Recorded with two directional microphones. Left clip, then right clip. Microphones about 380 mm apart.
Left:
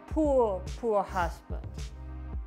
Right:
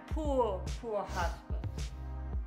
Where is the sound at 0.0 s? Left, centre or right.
Left.